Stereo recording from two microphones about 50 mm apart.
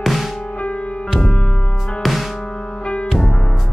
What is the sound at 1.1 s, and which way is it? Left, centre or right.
Music, centre.